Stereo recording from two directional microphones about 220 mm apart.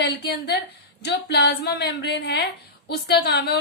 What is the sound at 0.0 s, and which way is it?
Speech, 50° left (ahead or behind).